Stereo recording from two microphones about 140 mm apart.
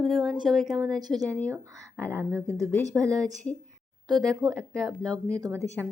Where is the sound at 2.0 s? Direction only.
20° right (ahead or behind).